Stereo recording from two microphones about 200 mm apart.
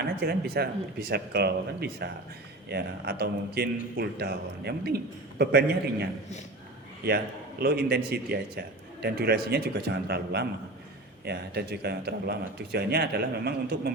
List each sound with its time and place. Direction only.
0.0 s a man's voice: 55° right (ahead or behind)
7.6 s a man's voice: 50° right (ahead or behind)